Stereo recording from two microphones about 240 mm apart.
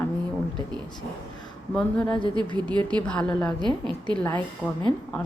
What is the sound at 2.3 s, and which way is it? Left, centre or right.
Speech, centre.